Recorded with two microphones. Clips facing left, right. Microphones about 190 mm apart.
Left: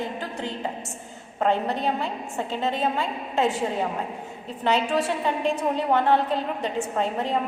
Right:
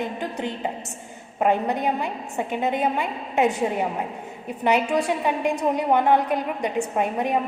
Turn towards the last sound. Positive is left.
turn(degrees=-15)  # may be behind; listen again after turning